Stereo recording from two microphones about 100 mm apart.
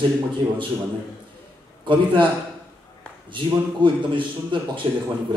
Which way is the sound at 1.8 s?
55° right (ahead or behind).